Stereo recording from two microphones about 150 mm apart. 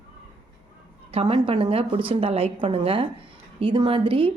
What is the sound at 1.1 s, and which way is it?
A woman's voice, 40° right (ahead or behind).